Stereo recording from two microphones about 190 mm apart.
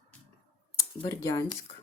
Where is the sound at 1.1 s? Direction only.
15° left (ahead or behind).